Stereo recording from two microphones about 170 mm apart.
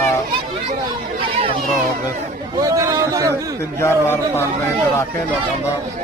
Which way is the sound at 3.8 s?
15° left (ahead or behind).